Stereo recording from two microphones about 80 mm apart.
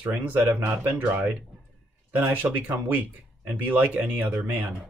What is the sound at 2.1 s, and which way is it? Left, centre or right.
Speech, right.